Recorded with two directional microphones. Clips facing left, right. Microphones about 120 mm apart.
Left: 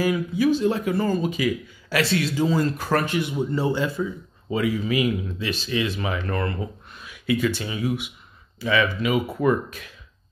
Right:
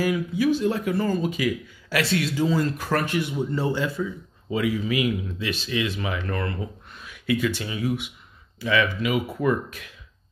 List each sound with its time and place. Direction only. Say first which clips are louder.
0.0 s speech: left 1 dB; 30° left (ahead or behind)
3.2 s a man's voice: left 1 dB; 15° left (ahead or behind)
3.8 s speech: left 1 dB; 30° left (ahead or behind)